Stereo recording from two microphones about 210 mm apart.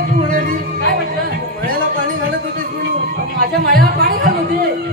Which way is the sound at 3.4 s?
45° right (ahead or behind).